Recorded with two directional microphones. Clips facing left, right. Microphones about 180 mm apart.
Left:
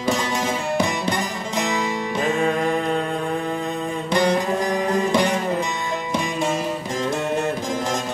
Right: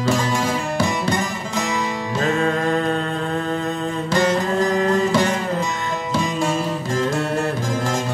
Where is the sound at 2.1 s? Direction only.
15° left (ahead or behind).